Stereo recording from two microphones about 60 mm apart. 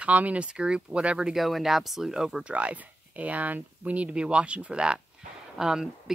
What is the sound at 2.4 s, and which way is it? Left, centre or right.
A woman's voice, right.